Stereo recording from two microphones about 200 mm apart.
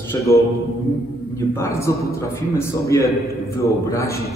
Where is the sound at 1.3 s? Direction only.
15° left (ahead or behind).